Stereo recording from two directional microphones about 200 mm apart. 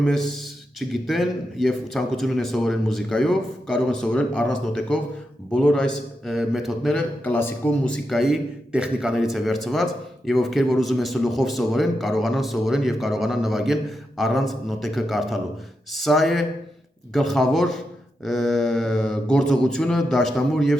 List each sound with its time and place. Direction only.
0.0 s a man's voice: 5° left (ahead or behind)